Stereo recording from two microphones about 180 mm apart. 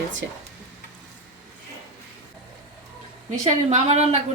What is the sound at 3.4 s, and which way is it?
Speech, 40° right (ahead or behind).